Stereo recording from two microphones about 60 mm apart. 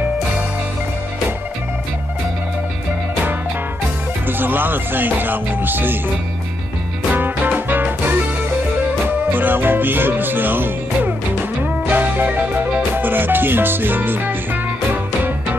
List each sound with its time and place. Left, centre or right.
4.3 s music: right
7.1 s music: right